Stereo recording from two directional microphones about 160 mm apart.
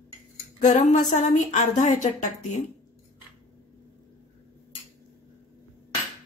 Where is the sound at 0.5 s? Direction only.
50° left (ahead or behind).